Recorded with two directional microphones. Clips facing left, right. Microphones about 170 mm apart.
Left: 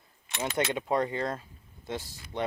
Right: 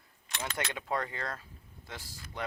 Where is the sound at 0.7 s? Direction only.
20° left (ahead or behind).